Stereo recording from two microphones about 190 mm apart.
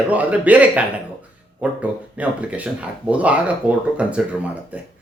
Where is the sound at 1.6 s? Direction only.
5° right (ahead or behind).